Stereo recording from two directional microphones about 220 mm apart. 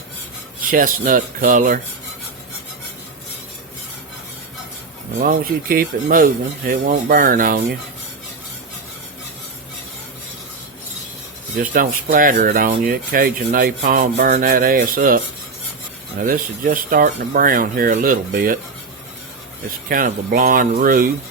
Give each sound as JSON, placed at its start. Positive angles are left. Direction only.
{"t": 0.7, "sound": "speech", "side_deg": -40}
{"t": 5.2, "sound": "speech", "side_deg": -40}
{"t": 11.5, "sound": "speech", "side_deg": -40}
{"t": 16.2, "sound": "speech", "side_deg": -40}
{"t": 19.9, "sound": "speech", "side_deg": -40}